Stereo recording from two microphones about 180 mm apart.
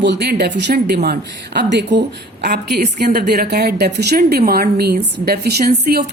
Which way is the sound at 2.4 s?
70° right (ahead or behind).